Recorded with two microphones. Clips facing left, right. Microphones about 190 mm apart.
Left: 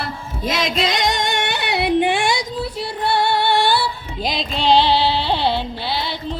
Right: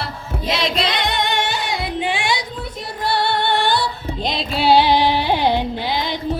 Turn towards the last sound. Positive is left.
turn(degrees=-15)  # may be behind; listen again after turning